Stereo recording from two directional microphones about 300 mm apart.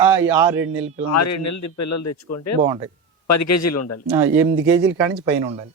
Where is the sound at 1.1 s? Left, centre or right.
Left.